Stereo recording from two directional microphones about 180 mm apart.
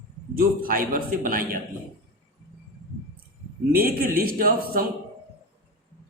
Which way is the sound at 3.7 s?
55° right (ahead or behind).